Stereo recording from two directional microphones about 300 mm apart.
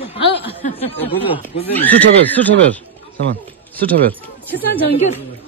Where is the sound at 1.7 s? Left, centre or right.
Centre.